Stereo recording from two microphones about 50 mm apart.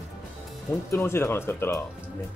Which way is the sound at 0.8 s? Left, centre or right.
Left.